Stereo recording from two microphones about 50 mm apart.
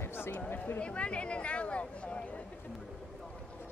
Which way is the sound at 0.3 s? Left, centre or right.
Left.